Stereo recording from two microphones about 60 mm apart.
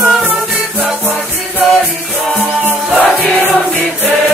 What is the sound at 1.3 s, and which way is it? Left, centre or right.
Music, left.